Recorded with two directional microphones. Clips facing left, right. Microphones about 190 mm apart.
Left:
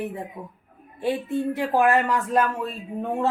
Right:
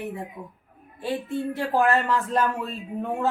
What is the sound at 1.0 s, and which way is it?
Speech, 20° left (ahead or behind).